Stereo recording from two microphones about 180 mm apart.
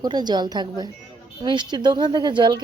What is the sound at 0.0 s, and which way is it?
Speech, 25° right (ahead or behind).